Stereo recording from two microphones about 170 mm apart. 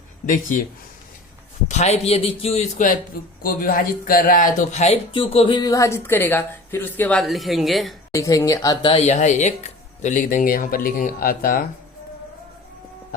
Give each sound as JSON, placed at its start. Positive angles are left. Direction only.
{"t": 1.6, "sound": "a man's voice", "side_deg": 40}
{"t": 8.1, "sound": "speech", "side_deg": 20}